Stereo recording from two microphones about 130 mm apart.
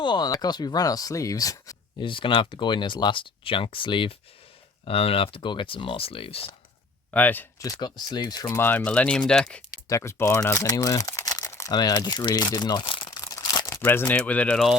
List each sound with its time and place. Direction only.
0.0 s speech: 35° left (ahead or behind)
2.0 s speech: 40° left (ahead or behind)
7.1 s speech: 10° left (ahead or behind)
7.6 s speech: 35° left (ahead or behind)
8.5 s speech: 15° left (ahead or behind)
9.9 s speech: 20° left (ahead or behind)